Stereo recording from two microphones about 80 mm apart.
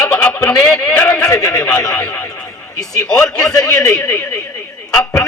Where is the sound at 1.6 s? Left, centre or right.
Centre.